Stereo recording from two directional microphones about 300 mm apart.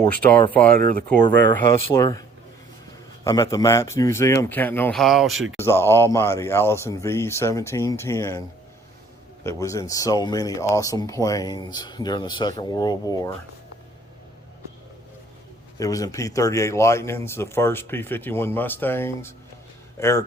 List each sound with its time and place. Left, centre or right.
0.5 s speech: centre
3.2 s speech: centre
15.8 s speech: centre